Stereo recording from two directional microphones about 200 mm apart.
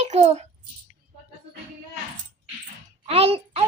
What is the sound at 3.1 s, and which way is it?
Speech, 30° right (ahead or behind).